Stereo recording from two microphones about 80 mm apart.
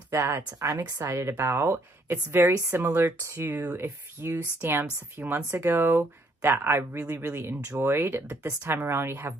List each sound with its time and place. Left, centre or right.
0.1 s speech: right
3.2 s speech: right
3.4 s speech: right